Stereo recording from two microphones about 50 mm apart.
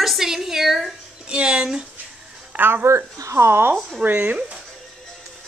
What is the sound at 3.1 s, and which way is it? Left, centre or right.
Speech, right.